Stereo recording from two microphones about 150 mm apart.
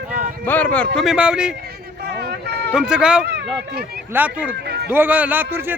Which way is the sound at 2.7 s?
5° right (ahead or behind).